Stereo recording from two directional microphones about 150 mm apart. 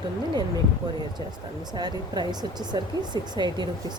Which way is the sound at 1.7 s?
30° right (ahead or behind).